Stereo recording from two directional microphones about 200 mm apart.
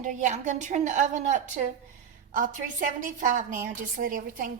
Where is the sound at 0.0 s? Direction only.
40° right (ahead or behind).